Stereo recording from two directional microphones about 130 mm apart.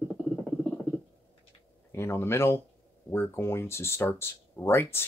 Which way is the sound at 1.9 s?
20° left (ahead or behind).